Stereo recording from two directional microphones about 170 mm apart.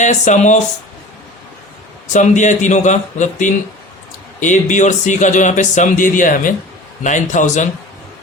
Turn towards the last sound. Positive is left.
turn(degrees=45)  # may be behind; listen again after turning